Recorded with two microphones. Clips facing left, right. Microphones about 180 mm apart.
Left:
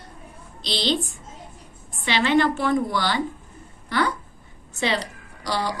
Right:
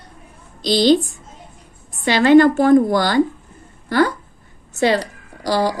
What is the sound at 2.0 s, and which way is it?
A woman's voice, 45° right (ahead or behind).